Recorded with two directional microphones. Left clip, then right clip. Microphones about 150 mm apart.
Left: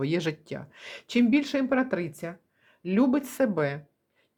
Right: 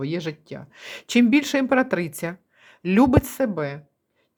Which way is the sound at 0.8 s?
15° right (ahead or behind).